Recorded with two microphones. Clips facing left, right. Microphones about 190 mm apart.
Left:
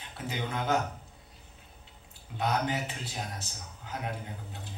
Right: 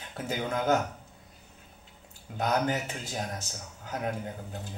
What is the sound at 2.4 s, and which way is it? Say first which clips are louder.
A man's voice: right 2 dB; 45° right (ahead or behind).